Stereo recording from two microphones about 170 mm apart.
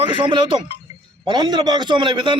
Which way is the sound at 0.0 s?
30° right (ahead or behind).